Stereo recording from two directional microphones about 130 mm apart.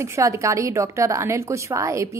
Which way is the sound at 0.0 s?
20° right (ahead or behind).